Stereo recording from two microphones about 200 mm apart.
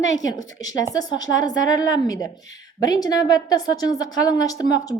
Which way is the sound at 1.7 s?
20° left (ahead or behind).